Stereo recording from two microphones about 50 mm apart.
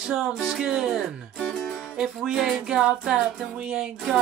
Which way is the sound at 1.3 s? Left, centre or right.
Centre.